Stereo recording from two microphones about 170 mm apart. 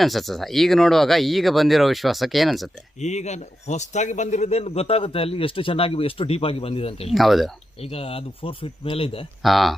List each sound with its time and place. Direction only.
0.0 s speech: centre (ahead or behind)
3.0 s a man's voice: 45° left (ahead or behind)
7.1 s speech: centre (ahead or behind)
7.8 s a man's voice: 35° left (ahead or behind)
9.4 s speech: centre (ahead or behind)